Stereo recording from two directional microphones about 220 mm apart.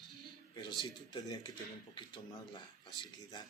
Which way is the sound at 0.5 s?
20° left (ahead or behind).